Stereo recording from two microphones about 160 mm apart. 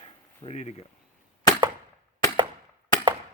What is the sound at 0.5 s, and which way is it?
Speech, 45° left (ahead or behind).